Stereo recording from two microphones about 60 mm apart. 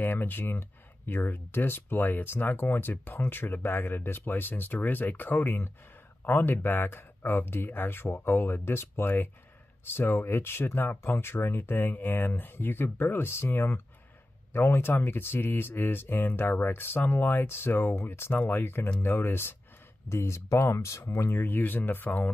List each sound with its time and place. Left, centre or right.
0.0 s speech: left
20.1 s speech: left
21.4 s speech: left